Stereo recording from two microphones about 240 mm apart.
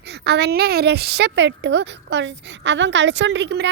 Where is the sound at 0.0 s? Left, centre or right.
Right.